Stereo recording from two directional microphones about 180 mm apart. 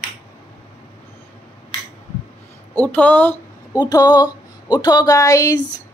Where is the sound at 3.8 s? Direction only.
20° left (ahead or behind).